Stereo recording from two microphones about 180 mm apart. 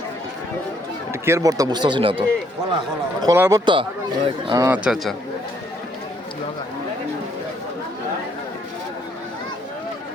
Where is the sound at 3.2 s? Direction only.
15° right (ahead or behind).